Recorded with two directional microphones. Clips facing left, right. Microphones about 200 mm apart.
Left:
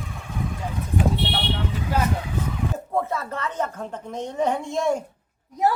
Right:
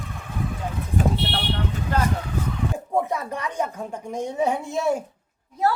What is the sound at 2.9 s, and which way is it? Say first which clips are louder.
A woman's voice: right 2 dB; 15° right (ahead or behind).